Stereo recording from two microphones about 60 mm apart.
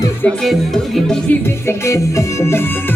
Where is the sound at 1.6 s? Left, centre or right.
Left.